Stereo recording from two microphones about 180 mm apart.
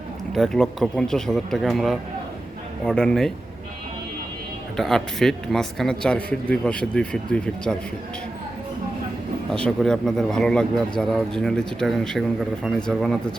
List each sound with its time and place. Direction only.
0.3 s speech: 5° left (ahead or behind)
4.8 s speech: centre (ahead or behind)
9.6 s speech: 5° left (ahead or behind)